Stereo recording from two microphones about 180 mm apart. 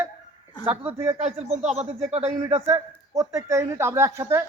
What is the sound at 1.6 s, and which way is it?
Speech, 40° right (ahead or behind).